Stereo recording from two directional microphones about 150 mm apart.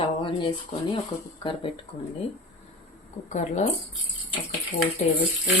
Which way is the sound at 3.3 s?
50° left (ahead or behind).